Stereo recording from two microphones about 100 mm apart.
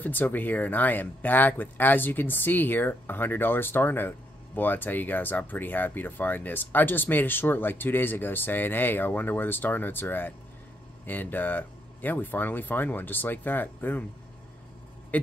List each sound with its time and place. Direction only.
0.0 s speech: 20° left (ahead or behind)